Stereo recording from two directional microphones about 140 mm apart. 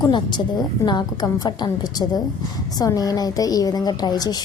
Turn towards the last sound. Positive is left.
turn(degrees=30)  # may be behind; listen again after turning